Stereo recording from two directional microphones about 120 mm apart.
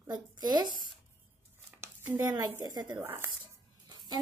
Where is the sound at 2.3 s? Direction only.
35° right (ahead or behind).